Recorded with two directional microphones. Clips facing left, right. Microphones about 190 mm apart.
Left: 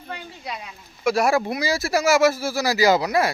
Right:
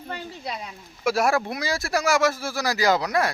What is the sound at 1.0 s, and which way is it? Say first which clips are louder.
Speech: left 2 dB; centre (ahead or behind).